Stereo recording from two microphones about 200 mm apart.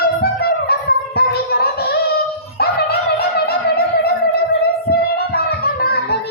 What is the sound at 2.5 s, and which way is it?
Dog, 50° left (ahead or behind).